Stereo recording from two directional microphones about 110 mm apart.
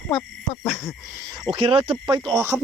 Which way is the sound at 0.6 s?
Centre (ahead or behind).